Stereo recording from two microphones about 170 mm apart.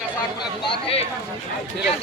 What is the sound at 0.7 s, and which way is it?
Speech, 35° left (ahead or behind).